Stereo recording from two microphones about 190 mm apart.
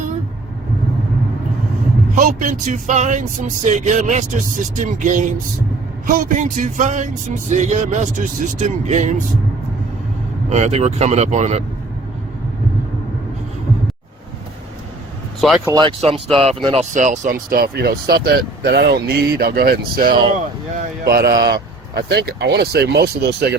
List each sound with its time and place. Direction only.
2.1 s speech: 40° right (ahead or behind)
10.5 s speech: 35° right (ahead or behind)
15.4 s speech: centre (ahead or behind)
15.6 s speech: 20° right (ahead or behind)
16.9 s speech: 40° right (ahead or behind); by 23.6 s 60° right (ahead or behind)